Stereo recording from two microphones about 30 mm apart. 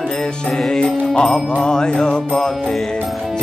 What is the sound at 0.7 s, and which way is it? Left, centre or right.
Music, left.